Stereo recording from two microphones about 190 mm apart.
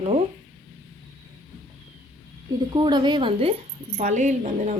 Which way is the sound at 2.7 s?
25° right (ahead or behind).